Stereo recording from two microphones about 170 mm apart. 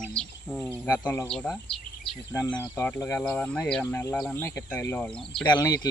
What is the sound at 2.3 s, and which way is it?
Speech, 20° left (ahead or behind).